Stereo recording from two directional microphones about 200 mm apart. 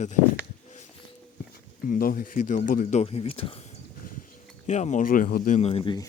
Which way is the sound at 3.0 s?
30° left (ahead or behind).